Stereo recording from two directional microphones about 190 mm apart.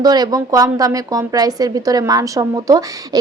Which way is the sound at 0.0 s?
20° right (ahead or behind).